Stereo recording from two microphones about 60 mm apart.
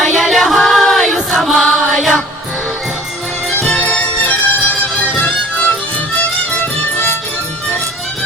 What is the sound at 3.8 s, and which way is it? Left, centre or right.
Music, left.